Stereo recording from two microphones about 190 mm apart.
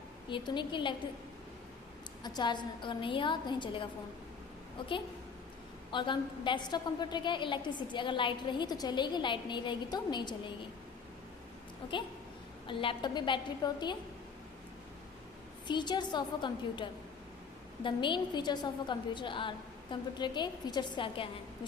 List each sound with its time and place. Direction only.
0.3 s a woman's voice: 25° left (ahead or behind)
2.2 s a woman's voice: 20° left (ahead or behind)
5.9 s a woman's voice: 25° left (ahead or behind)
12.6 s a woman's voice: 25° left (ahead or behind)
15.6 s a woman's voice: 25° left (ahead or behind)